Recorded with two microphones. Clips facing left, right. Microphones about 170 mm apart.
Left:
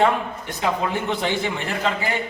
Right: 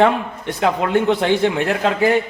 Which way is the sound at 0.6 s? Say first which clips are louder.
Right 6 dB; 65° right (ahead or behind).